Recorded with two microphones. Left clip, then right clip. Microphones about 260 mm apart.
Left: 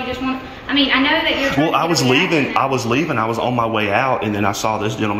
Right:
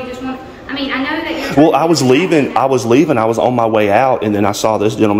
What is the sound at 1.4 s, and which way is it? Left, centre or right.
Speech, centre.